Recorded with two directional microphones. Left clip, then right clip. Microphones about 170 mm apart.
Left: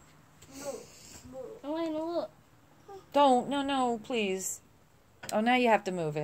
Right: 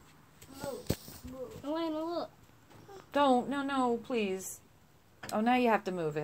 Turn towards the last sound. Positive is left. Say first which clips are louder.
# left 3 dB
turn(degrees=15)  # may be behind; listen again after turning